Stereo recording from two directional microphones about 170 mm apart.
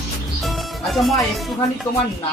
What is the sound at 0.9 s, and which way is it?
Speech, centre (ahead or behind).